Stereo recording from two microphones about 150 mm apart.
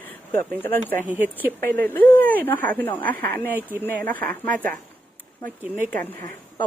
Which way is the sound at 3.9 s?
10° left (ahead or behind).